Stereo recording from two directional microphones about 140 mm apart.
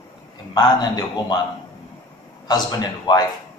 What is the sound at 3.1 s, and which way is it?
Speech, 30° left (ahead or behind).